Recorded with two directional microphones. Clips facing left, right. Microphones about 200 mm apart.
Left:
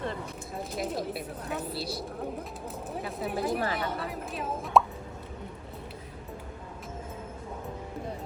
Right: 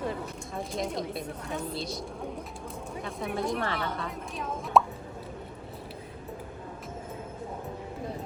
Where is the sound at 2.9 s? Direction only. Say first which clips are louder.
Left 1 dB; 5° left (ahead or behind).